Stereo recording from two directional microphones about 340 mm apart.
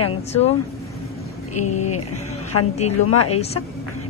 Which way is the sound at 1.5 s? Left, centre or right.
Left.